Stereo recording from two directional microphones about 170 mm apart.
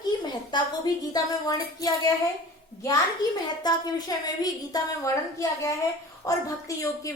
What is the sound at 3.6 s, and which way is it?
A woman's voice, 20° left (ahead or behind).